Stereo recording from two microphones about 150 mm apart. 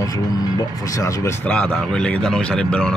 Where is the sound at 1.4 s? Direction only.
10° left (ahead or behind).